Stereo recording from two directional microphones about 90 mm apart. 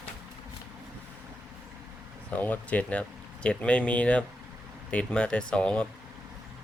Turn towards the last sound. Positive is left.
turn(degrees=10)  # may be behind; listen again after turning